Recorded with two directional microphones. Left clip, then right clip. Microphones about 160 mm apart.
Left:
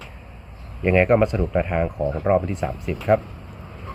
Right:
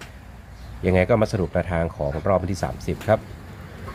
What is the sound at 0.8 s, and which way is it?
Speech, 15° right (ahead or behind).